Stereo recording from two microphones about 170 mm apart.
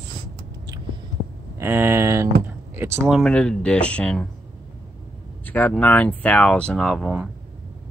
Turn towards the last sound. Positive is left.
turn(degrees=-5)  # may be behind; listen again after turning